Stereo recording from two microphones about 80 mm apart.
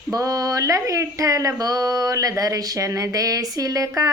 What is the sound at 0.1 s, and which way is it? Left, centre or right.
Speech, right.